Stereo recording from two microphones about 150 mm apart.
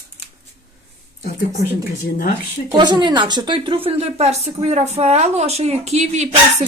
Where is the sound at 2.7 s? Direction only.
30° right (ahead or behind); by 6.3 s 50° right (ahead or behind).